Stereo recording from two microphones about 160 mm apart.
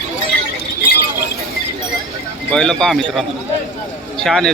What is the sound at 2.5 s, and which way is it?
Speech, 5° left (ahead or behind).